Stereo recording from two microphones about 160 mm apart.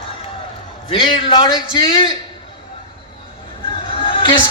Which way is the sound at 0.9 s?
30° left (ahead or behind).